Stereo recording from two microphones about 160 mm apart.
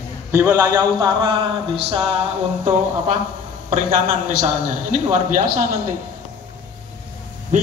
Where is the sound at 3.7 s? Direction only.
50° right (ahead or behind).